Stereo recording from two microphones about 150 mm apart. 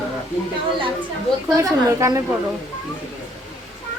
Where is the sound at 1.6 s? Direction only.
20° right (ahead or behind).